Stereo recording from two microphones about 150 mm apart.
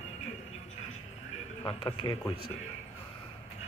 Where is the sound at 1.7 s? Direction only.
35° left (ahead or behind).